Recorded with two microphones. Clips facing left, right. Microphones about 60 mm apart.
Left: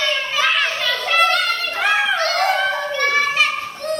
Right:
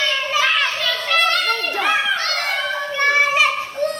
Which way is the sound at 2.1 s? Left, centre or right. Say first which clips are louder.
Left 3 dB; centre.